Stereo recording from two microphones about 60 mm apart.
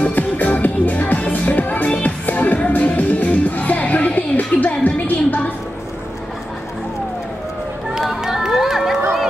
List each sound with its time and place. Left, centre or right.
0.0 s music: left
8.0 s run: centre